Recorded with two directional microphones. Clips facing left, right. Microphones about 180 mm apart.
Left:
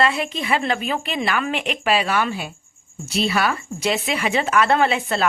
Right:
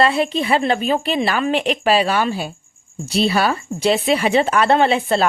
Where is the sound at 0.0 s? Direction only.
35° right (ahead or behind).